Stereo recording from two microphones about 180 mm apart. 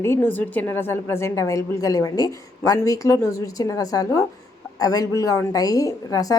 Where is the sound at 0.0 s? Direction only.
15° left (ahead or behind).